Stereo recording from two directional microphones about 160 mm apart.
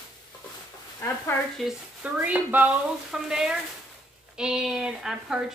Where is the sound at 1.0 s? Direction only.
15° left (ahead or behind).